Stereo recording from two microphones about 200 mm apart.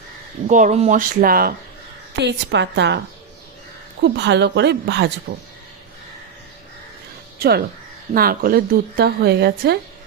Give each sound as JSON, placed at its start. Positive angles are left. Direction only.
{"t": 0.4, "sound": "speech", "side_deg": -35}
{"t": 2.1, "sound": "a woman's voice", "side_deg": -60}
{"t": 4.0, "sound": "a woman's voice", "side_deg": -60}
{"t": 7.3, "sound": "a woman's voice", "side_deg": -50}